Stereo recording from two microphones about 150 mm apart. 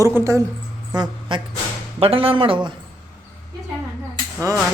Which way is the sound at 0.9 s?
25° right (ahead or behind).